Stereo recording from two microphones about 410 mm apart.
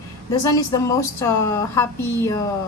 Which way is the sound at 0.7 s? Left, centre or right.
Centre.